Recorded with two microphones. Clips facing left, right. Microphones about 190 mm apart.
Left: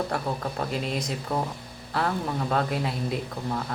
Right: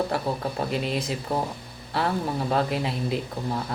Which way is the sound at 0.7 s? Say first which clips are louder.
Right 2 dB; centre (ahead or behind).